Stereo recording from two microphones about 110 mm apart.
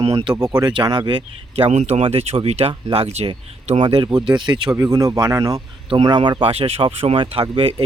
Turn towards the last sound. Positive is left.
turn(degrees=-55)  # may be behind; listen again after turning